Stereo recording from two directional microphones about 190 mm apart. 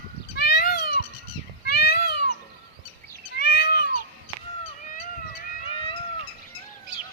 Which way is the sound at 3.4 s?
60° left (ahead or behind).